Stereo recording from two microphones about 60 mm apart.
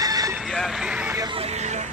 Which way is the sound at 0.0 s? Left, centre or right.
Right.